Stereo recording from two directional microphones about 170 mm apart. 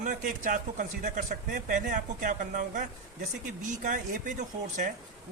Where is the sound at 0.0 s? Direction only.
50° right (ahead or behind).